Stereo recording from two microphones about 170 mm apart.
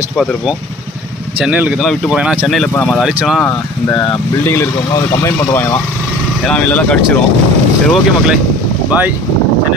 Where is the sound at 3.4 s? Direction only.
20° left (ahead or behind).